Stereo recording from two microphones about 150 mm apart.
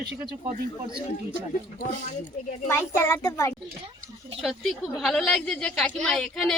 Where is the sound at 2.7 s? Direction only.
20° left (ahead or behind).